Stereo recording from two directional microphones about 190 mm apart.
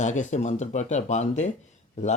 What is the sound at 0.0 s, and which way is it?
Speech, 40° left (ahead or behind).